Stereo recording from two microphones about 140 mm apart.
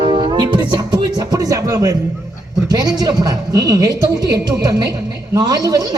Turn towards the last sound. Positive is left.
turn(degrees=-25)  # may be behind; listen again after turning